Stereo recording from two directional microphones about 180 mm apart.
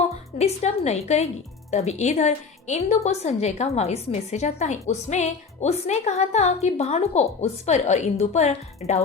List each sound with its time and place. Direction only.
0.3 s a woman's voice: 35° left (ahead or behind)